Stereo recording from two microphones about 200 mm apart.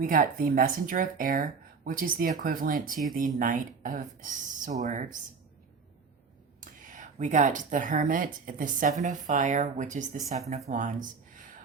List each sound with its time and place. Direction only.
0.0 s speech: 45° right (ahead or behind)
6.6 s speech: 40° right (ahead or behind)
10.7 s a sound: 40° right (ahead or behind)